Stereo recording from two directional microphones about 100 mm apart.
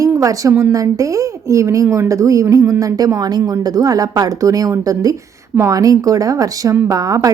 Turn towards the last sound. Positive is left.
turn(degrees=-35)  # may be behind; listen again after turning